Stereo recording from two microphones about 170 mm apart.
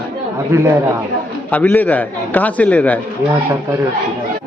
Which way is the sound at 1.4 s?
10° left (ahead or behind).